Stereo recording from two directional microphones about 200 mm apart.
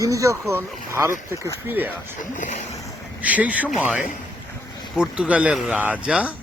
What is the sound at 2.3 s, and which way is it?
Speech, 40° left (ahead or behind).